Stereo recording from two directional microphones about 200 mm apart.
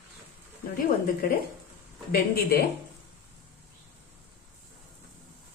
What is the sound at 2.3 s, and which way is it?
Speech, 50° left (ahead or behind).